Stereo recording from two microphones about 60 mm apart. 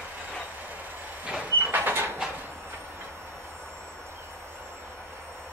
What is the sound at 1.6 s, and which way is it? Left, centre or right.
Sliding door, right.